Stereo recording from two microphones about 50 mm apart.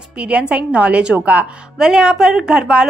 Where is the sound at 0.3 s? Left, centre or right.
Right.